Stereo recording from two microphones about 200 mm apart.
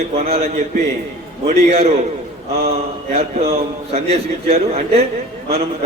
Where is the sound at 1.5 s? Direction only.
30° right (ahead or behind).